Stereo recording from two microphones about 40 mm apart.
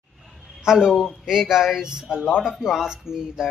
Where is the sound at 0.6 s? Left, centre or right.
Centre.